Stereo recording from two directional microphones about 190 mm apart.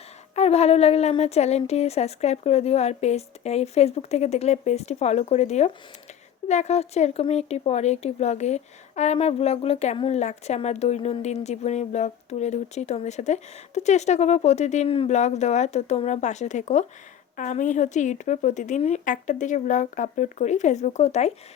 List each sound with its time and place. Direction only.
0.3 s speech: 35° left (ahead or behind)